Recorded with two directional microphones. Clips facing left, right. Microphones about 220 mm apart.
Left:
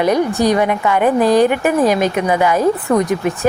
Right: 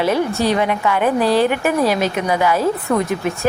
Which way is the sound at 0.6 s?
45° left (ahead or behind).